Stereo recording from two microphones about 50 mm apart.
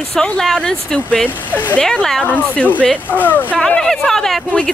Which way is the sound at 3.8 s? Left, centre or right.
Centre.